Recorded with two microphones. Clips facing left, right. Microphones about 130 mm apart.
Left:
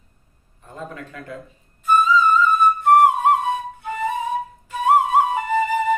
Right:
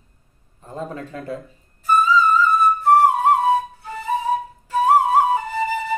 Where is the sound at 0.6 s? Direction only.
35° right (ahead or behind).